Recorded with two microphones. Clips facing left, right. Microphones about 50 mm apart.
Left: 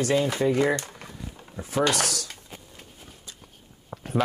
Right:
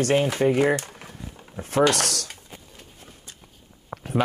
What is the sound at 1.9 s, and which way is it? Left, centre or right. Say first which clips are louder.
Chopping: right 1 dB; right.